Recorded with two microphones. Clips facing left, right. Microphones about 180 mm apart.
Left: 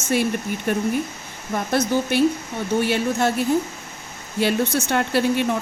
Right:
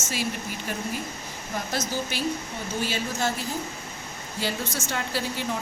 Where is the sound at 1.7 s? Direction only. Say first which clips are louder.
Left 11 dB; 60° left (ahead or behind).